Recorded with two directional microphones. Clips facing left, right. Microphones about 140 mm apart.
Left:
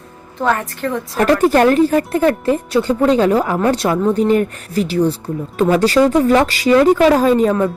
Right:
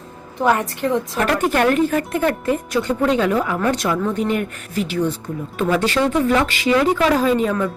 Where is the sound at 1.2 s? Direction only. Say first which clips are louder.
Left 7 dB; 35° left (ahead or behind).